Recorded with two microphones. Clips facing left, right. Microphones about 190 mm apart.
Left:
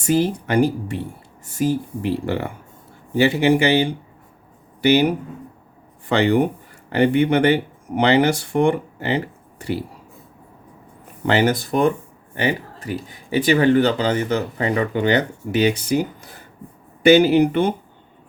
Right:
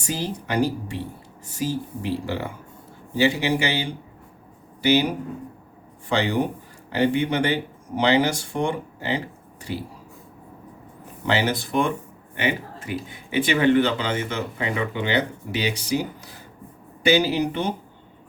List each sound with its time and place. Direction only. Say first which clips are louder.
0.0 s speech: left 10 dB; 55° left (ahead or behind)
11.3 s speech: left 5 dB; 50° left (ahead or behind)